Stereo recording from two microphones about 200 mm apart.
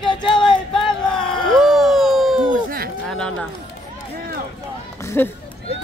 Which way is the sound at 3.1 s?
5° left (ahead or behind).